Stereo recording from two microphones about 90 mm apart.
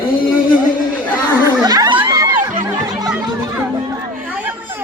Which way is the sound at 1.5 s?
45° right (ahead or behind).